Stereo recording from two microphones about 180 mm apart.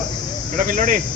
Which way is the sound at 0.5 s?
45° right (ahead or behind).